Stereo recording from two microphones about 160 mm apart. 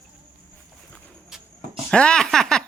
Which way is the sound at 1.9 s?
5° left (ahead or behind).